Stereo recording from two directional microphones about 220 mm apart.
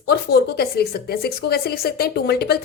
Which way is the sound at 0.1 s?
45° left (ahead or behind).